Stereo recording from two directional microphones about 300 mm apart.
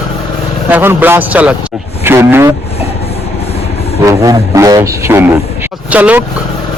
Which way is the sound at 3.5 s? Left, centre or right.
Left.